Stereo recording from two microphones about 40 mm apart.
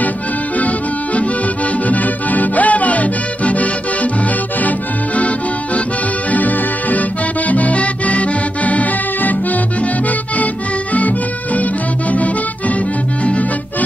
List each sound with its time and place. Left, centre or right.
0.6 s accordion: left
1.9 s music: left
4.6 s accordion: left
6.3 s music: left